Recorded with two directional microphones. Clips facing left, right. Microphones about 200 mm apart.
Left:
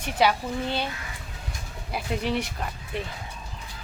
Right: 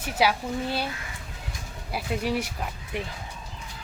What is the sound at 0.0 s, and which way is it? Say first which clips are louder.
Speech: left 1 dB; 5° right (ahead or behind).